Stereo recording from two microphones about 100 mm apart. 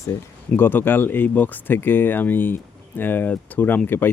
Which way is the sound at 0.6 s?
20° left (ahead or behind).